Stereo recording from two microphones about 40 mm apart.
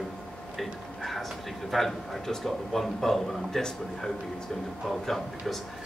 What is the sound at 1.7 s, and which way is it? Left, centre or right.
A man's voice, centre.